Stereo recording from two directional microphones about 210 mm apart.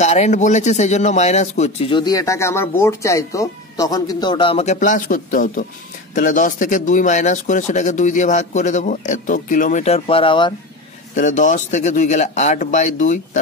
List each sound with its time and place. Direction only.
0.0 s speech: 30° left (ahead or behind)
11.1 s speech: 35° left (ahead or behind)